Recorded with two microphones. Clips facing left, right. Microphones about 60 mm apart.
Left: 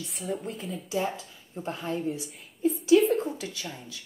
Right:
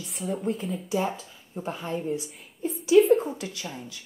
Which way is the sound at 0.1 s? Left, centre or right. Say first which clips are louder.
Right 6 dB; centre.